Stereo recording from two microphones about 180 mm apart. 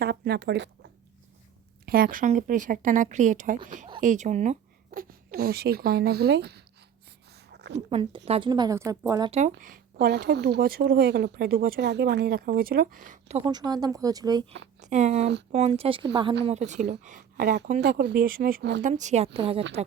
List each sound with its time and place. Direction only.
0.0 s speech: 60° right (ahead or behind); by 0.9 s 80° right
1.9 s a woman's voice: 55° right (ahead or behind)
7.5 s a sound: 70° right (ahead or behind)
7.9 s a woman's voice: 30° right (ahead or behind)
9.3 s speech: 45° right (ahead or behind)
13.4 s a woman's voice: 25° right (ahead or behind)
14.8 s a woman's voice: 40° right (ahead or behind)
17.8 s a woman's voice: 65° right (ahead or behind); by 19.6 s 30° right (ahead or behind)